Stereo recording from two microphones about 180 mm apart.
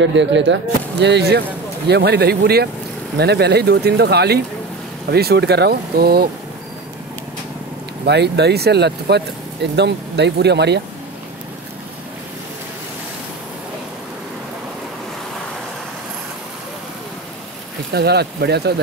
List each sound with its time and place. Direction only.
0.0 s speech: 90° right; by 6.2 s 60° right (ahead or behind)
8.0 s speech: 70° right (ahead or behind)
17.9 s speech: 65° right (ahead or behind)